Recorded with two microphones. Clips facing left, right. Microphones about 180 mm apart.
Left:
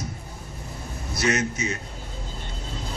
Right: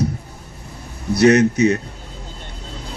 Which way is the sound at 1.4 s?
35° right (ahead or behind).